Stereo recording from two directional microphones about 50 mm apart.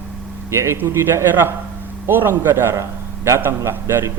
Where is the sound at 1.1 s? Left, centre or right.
Right.